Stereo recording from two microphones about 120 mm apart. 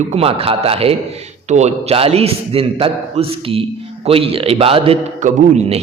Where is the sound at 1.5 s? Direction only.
70° right (ahead or behind); by 5.0 s 50° right (ahead or behind).